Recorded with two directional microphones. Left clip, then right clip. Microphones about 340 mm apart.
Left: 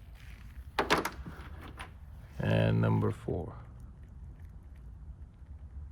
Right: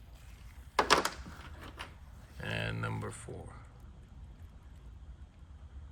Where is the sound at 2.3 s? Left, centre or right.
Centre.